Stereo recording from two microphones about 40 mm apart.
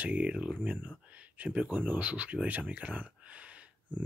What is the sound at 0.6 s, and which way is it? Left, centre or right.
Speech, right.